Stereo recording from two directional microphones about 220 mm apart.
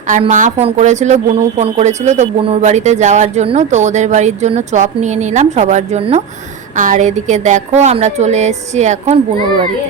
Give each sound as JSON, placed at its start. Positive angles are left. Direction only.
{"t": 0.1, "sound": "a woman's voice", "side_deg": -35}